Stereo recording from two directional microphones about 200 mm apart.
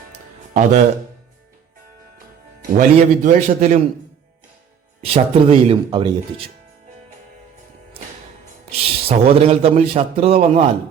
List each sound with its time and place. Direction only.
0.5 s a man's voice: 35° right (ahead or behind)
2.7 s a man's voice: 35° right (ahead or behind)
5.0 s a man's voice: 30° right (ahead or behind)
8.8 s a man's voice: 30° right (ahead or behind)